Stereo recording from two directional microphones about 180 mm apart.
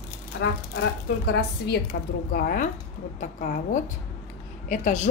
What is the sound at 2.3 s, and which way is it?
A woman's voice, 55° left (ahead or behind).